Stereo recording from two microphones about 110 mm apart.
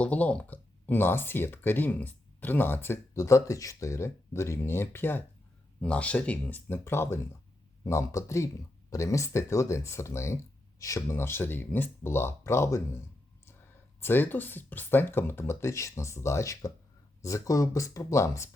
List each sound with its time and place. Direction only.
0.0 s speech: 10° left (ahead or behind)
14.0 s speech: 20° left (ahead or behind)